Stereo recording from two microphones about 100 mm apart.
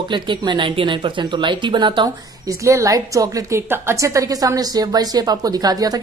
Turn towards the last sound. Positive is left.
turn(degrees=-40)  # may be behind; listen again after turning